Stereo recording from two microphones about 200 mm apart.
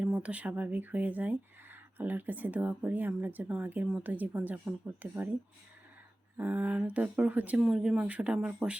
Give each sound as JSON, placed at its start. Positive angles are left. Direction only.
{"t": 0.0, "sound": "speech", "side_deg": -5}
{"t": 6.3, "sound": "speech", "side_deg": -10}